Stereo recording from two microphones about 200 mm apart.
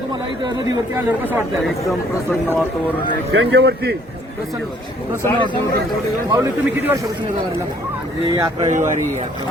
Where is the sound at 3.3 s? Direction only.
60° right (ahead or behind).